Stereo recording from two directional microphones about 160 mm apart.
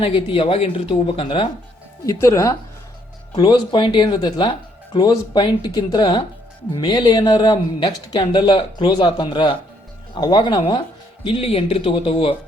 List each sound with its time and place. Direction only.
0.0 s speech: 35° left (ahead or behind)
2.0 s speech: 20° left (ahead or behind); by 12.3 s 35° left (ahead or behind)